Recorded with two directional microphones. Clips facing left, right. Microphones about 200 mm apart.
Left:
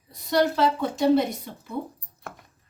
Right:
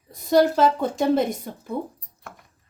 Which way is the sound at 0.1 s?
50° right (ahead or behind).